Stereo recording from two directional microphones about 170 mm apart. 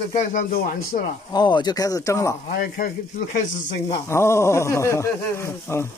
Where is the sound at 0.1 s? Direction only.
55° left (ahead or behind).